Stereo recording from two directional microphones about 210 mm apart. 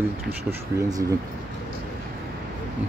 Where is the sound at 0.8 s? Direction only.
15° right (ahead or behind).